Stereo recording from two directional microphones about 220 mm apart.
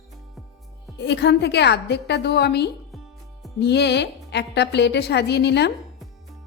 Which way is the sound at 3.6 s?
50° left (ahead or behind).